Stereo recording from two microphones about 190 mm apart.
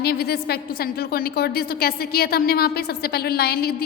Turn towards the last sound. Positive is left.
turn(degrees=55)  # may be behind; listen again after turning